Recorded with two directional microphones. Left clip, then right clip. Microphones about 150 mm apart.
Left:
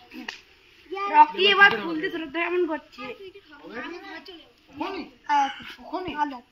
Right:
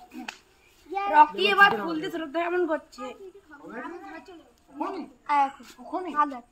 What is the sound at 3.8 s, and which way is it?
Speech, 50° right (ahead or behind).